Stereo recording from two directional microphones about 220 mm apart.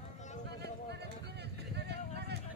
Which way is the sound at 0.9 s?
50° right (ahead or behind).